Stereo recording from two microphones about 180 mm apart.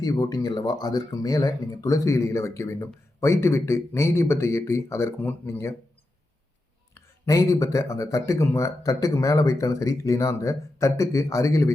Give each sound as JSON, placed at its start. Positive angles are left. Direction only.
{"t": 0.0, "sound": "speech", "side_deg": 20}
{"t": 6.9, "sound": "speech", "side_deg": 15}